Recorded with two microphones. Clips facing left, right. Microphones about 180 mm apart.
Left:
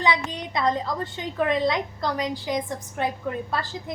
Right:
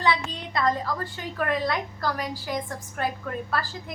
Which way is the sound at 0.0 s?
15° left (ahead or behind).